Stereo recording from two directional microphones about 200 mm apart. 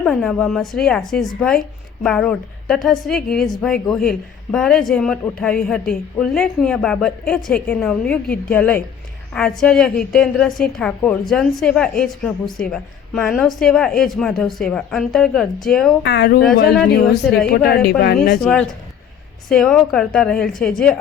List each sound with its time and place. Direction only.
0.0 s a woman's voice: centre (ahead or behind)
16.0 s speech: 60° left (ahead or behind)
17.5 s a woman's voice: 50° left (ahead or behind)
18.4 s a woman's voice: 5° left (ahead or behind)